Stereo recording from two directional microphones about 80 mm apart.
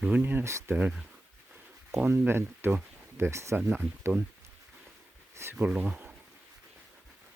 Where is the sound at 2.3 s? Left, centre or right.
Right.